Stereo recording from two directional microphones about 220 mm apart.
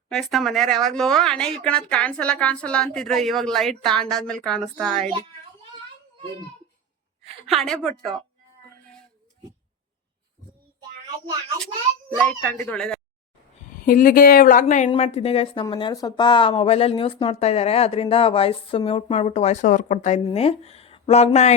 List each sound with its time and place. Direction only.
0.1 s speech: centre (ahead or behind)
7.4 s speech: centre (ahead or behind)
11.6 s a child's voice: 5° left (ahead or behind)
13.7 s a woman's voice: 40° left (ahead or behind)